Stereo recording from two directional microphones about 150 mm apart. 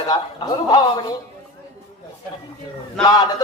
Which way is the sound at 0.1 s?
25° left (ahead or behind).